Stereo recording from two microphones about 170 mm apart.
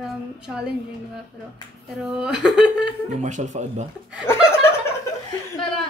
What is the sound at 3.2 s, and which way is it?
Speech, 45° right (ahead or behind).